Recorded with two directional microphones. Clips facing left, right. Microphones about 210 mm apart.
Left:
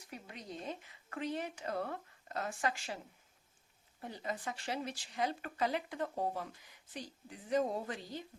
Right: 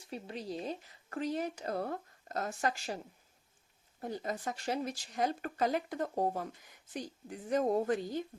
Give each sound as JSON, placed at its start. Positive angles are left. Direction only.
{"t": 0.0, "sound": "speech", "side_deg": -30}
{"t": 4.0, "sound": "speech", "side_deg": -40}